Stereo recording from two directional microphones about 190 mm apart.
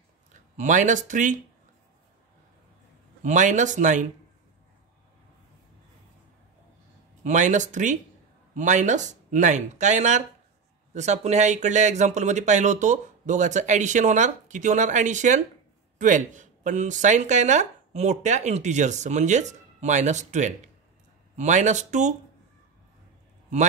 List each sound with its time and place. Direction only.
0.3 s speech: 40° right (ahead or behind)
3.2 s speech: 40° right (ahead or behind)
7.2 s speech: 40° right (ahead or behind)